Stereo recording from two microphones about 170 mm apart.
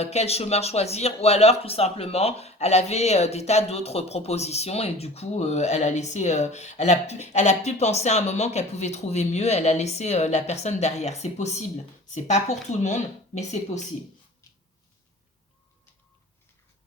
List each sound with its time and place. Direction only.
0.0 s speech: 40° left (ahead or behind)